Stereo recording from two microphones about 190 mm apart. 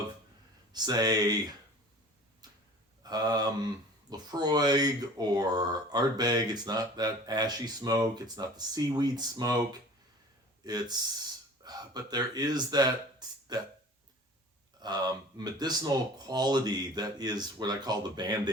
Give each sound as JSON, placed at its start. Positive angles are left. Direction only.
{"t": 0.7, "sound": "speech", "side_deg": -20}
{"t": 2.4, "sound": "tick-tock", "side_deg": -20}
{"t": 3.0, "sound": "speech", "side_deg": -20}
{"t": 10.6, "sound": "speech", "side_deg": -20}
{"t": 14.8, "sound": "speech", "side_deg": -20}